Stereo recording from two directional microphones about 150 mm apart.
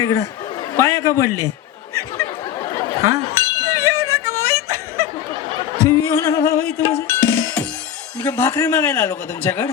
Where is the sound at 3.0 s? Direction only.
20° right (ahead or behind).